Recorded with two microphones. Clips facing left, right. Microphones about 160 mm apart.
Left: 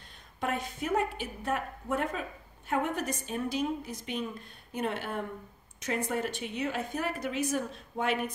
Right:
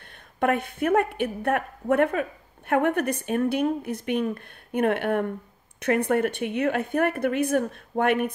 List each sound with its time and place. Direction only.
0.4 s speech: 60° right (ahead or behind)